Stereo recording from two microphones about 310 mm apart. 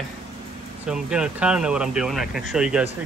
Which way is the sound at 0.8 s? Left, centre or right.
Centre.